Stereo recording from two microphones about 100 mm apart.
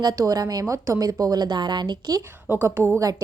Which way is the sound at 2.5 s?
25° right (ahead or behind).